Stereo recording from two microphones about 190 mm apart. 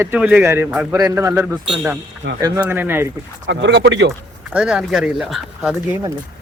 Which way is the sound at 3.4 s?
70° right (ahead or behind).